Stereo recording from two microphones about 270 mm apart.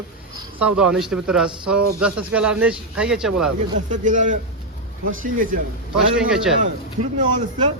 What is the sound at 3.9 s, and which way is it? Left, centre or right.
A man's voice, right.